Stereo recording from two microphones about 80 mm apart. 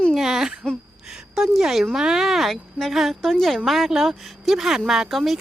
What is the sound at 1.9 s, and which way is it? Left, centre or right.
A woman's voice, centre.